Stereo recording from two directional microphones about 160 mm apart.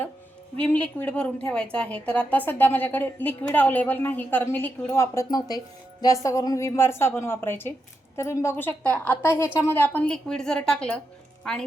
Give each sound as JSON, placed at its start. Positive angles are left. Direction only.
{"t": 0.6, "sound": "a woman's voice", "side_deg": 10}